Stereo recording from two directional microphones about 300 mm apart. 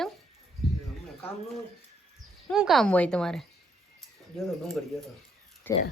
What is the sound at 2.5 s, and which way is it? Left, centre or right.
A woman's voice, centre.